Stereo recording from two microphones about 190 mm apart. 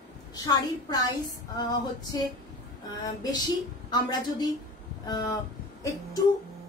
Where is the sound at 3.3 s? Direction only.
20° left (ahead or behind).